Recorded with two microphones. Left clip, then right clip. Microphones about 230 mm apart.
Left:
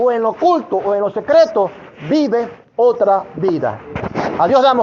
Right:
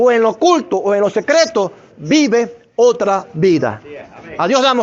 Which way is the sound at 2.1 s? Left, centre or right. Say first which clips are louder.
Right 2 dB; right.